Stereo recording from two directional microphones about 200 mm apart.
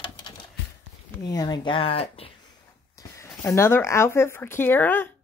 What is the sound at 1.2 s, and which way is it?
Speech, 20° left (ahead or behind).